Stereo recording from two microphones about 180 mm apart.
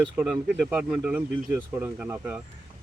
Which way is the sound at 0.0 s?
5° right (ahead or behind).